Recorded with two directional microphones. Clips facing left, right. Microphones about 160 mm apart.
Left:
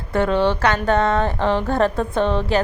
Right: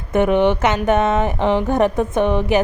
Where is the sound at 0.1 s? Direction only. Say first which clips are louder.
Right 3 dB; 20° right (ahead or behind).